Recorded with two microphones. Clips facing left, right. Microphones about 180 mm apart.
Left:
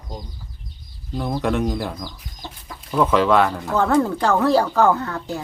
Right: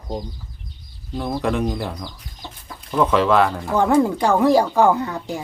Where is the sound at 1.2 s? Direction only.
Centre (ahead or behind).